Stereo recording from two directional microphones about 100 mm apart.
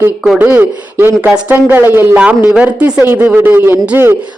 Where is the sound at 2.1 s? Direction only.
10° right (ahead or behind).